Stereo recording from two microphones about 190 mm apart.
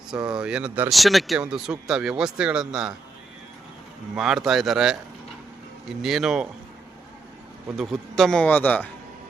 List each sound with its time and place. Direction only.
0.1 s speech: 5° right (ahead or behind)
4.1 s speech: 5° right (ahead or behind)
6.0 s speech: centre (ahead or behind)
7.8 s speech: centre (ahead or behind)